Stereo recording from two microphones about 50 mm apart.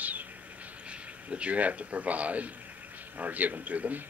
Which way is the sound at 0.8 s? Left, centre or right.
Right.